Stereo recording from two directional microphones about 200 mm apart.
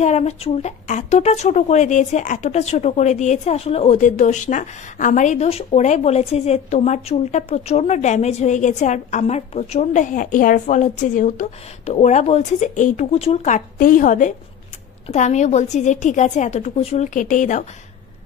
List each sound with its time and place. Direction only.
0.0 s speech: 35° left (ahead or behind)